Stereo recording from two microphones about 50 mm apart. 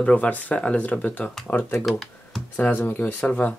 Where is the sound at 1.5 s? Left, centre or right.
Left.